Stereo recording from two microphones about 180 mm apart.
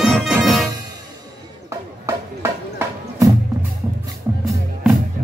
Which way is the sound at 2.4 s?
15° right (ahead or behind).